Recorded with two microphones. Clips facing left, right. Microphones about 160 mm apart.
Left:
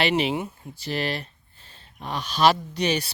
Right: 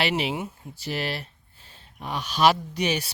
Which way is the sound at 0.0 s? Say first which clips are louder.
Left 3 dB; 5° right (ahead or behind).